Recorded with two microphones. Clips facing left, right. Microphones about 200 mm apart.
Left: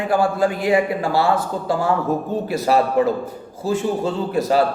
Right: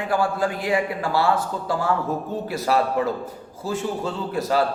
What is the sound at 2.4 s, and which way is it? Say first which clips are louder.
A man's voice: left 3 dB; 20° left (ahead or behind).